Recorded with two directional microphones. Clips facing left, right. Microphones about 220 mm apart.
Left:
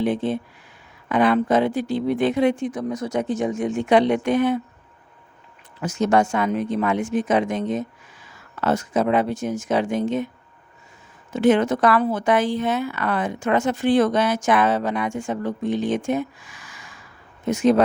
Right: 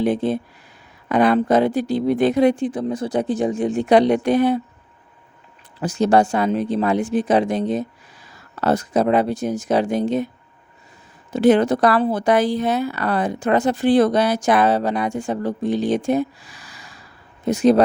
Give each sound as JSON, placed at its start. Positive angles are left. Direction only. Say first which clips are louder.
{"t": 0.0, "sound": "speech", "louder": "right 3 dB", "side_deg": -40}
{"t": 5.8, "sound": "speech", "louder": "right 3 dB", "side_deg": -35}
{"t": 11.3, "sound": "speech", "louder": "right 3 dB", "side_deg": -35}